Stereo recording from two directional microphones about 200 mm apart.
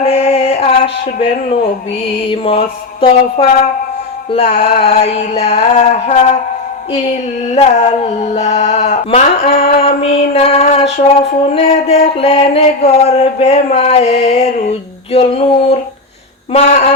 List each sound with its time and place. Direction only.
0.0 s a sound: 30° left (ahead or behind)
2.3 s music: 30° left (ahead or behind)
3.4 s mantra: 30° left (ahead or behind)
7.5 s mantra: 35° left (ahead or behind)
15.1 s music: 30° left (ahead or behind)
16.6 s mantra: 40° left (ahead or behind)